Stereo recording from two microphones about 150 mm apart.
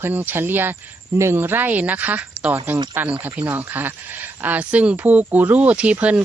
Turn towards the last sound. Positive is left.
turn(degrees=-10)  # may be behind; listen again after turning